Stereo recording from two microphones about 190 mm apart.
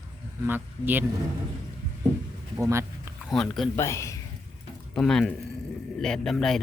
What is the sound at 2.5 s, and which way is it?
Speech, 15° right (ahead or behind).